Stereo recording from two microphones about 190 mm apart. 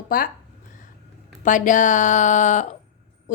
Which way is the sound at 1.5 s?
40° left (ahead or behind).